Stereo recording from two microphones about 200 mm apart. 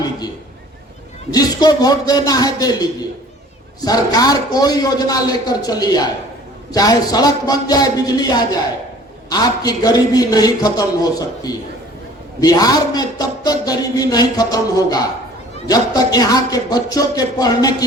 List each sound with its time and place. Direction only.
1.3 s speech: 20° left (ahead or behind)